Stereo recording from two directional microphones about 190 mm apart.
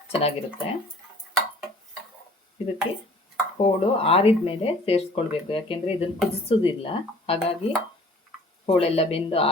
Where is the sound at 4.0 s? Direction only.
30° left (ahead or behind).